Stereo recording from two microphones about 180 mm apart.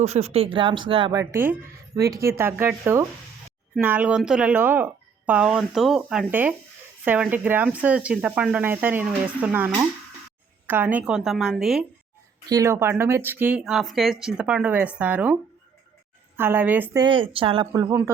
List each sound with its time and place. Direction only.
0.0 s a woman's voice: 35° right (ahead or behind); by 11.9 s centre (ahead or behind)
12.5 s speech: 15° right (ahead or behind)
16.4 s speech: 10° right (ahead or behind)
17.0 s speech: 30° right (ahead or behind)
17.7 s speech: 15° right (ahead or behind)